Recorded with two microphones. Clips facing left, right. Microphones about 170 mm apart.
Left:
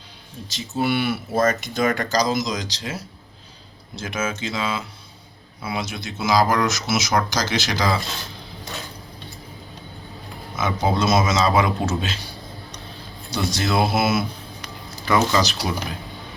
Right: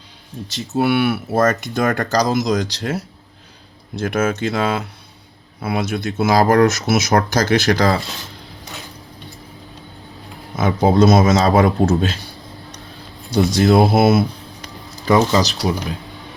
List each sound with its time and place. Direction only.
0.8 s speech: 65° right (ahead or behind)
10.8 s speech: 50° right (ahead or behind)
13.3 s speech: 50° right (ahead or behind)
15.0 s speech: 35° right (ahead or behind)